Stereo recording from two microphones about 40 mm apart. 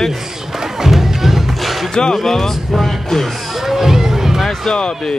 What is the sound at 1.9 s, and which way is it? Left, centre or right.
Speech, centre.